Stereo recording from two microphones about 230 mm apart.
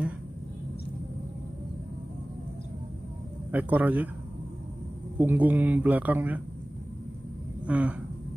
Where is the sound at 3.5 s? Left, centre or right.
Centre.